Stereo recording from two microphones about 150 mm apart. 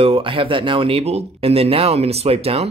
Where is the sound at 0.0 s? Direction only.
35° right (ahead or behind).